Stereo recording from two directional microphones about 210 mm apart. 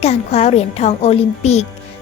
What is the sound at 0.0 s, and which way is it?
A child's voice, 30° left (ahead or behind).